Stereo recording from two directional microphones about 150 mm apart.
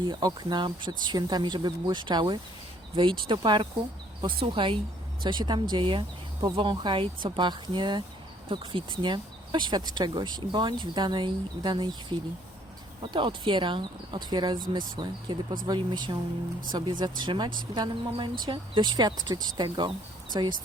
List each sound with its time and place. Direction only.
0.0 s speech: 30° right (ahead or behind)